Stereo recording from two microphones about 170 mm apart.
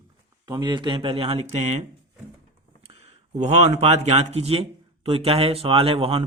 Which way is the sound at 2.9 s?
40° right (ahead or behind).